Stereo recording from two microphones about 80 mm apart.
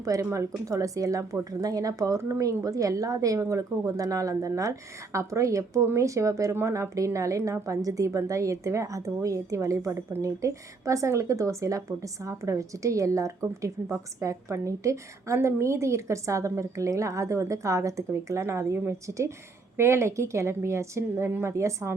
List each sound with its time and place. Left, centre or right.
0.0 s speech: right